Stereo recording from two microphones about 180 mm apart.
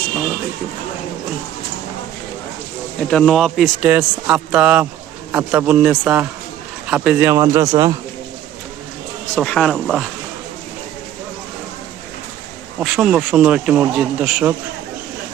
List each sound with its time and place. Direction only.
3.1 s a man's voice: 5° left (ahead or behind); by 7.9 s 25° right (ahead or behind)
9.3 s speech: 5° left (ahead or behind)
12.8 s speech: 5° right (ahead or behind)